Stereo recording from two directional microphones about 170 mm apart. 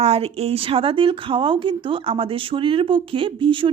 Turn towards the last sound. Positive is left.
turn(degrees=-30)  # may be behind; listen again after turning